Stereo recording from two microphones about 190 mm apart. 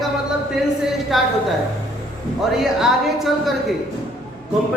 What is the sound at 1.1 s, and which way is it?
Speech, centre (ahead or behind).